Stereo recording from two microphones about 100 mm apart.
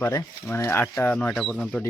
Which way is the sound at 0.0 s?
30° left (ahead or behind).